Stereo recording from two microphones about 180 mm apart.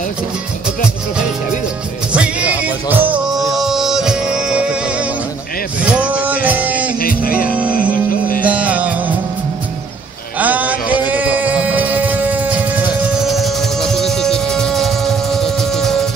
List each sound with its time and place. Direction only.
2.1 s music: 5° right (ahead or behind)
5.8 s music: 5° right (ahead or behind)
7.0 s music: 55° left (ahead or behind)
8.5 s music: 10° right (ahead or behind)
10.4 s music: 10° right (ahead or behind)